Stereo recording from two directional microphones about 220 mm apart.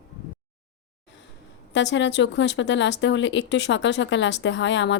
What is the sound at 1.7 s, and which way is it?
Speech, 55° left (ahead or behind).